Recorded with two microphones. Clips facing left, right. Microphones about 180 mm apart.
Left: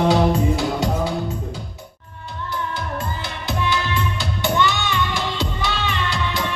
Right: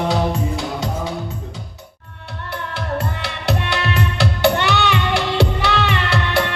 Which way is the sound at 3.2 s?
70° right (ahead or behind).